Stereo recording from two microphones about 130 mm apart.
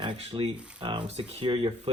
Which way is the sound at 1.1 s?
50° right (ahead or behind).